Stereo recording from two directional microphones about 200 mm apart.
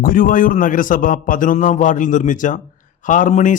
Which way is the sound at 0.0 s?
45° left (ahead or behind).